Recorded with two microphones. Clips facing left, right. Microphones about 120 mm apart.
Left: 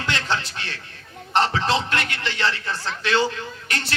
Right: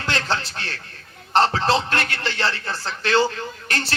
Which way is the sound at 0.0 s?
35° right (ahead or behind).